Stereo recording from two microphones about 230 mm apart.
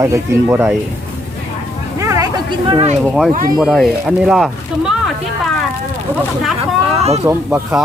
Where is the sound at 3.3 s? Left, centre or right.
Right.